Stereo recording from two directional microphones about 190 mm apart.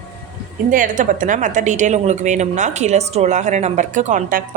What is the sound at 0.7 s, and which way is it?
Speech, 45° right (ahead or behind).